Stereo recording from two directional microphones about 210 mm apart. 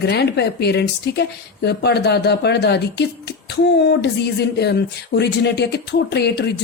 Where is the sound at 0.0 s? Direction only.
55° left (ahead or behind).